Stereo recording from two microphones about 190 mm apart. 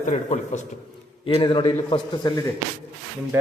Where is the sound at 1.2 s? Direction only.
25° left (ahead or behind).